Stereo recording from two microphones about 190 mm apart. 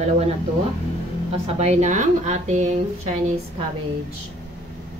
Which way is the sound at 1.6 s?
35° right (ahead or behind).